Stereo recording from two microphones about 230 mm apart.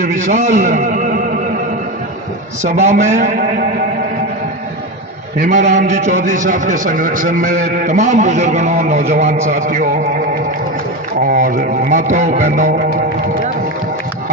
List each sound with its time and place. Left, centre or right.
0.0 s a man's voice: right
2.6 s a man's voice: right
5.4 s a man's voice: right
11.3 s a man's voice: right